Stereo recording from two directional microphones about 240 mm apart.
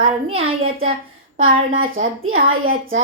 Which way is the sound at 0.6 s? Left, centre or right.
Right.